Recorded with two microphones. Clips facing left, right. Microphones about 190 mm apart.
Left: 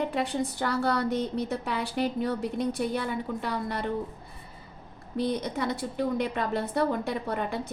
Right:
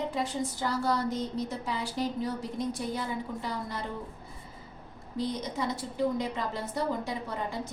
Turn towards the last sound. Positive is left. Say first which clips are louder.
# left 4 dB
turn(degrees=65)  # may be behind; listen again after turning